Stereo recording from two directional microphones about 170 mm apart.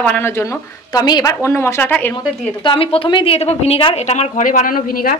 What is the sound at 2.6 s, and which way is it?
A woman's voice, 30° left (ahead or behind).